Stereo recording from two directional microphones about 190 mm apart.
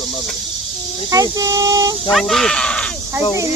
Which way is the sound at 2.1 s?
Centre (ahead or behind).